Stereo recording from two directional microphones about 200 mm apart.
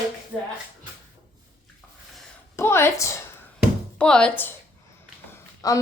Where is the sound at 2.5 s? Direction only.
10° left (ahead or behind).